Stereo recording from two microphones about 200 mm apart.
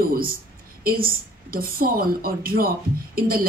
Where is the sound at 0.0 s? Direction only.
45° right (ahead or behind).